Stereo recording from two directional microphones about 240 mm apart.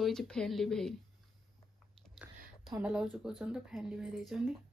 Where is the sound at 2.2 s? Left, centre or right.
Centre.